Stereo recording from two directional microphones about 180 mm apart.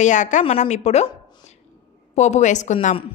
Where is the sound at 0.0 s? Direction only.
45° left (ahead or behind).